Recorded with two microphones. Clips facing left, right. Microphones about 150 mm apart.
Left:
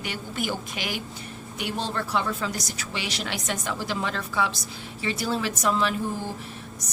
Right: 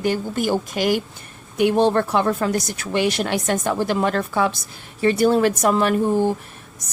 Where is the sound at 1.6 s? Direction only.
55° right (ahead or behind).